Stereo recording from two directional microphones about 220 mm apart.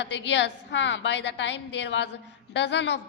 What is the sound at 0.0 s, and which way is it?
A woman's voice, 55° left (ahead or behind).